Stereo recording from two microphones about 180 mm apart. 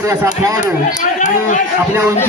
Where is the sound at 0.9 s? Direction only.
45° left (ahead or behind).